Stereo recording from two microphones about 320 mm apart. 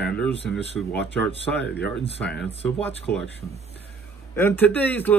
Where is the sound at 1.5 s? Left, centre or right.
Left.